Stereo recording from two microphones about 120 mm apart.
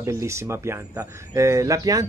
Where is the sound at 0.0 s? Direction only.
25° right (ahead or behind).